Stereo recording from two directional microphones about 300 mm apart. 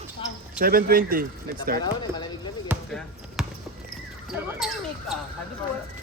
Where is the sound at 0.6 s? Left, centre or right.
Right.